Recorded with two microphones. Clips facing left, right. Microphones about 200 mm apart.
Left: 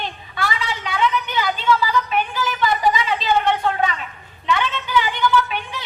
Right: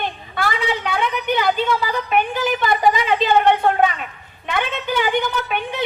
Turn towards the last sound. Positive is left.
turn(degrees=-55)  # may be behind; listen again after turning